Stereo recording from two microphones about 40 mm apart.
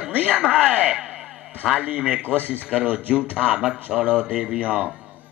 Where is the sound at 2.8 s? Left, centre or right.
Right.